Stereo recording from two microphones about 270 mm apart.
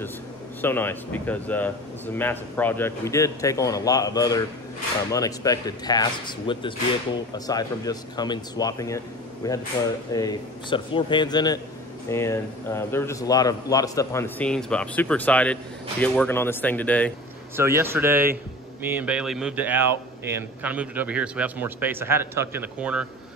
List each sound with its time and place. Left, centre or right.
0.6 s a man's voice: centre
17.6 s a man's voice: centre